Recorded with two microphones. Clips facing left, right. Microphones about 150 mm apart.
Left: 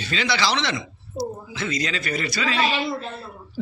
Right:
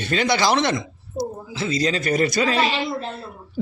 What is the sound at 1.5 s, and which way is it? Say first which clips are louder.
A man's voice: right 5 dB; 30° right (ahead or behind).